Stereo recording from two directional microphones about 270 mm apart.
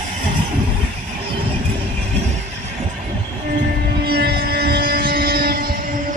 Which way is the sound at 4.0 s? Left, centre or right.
Right.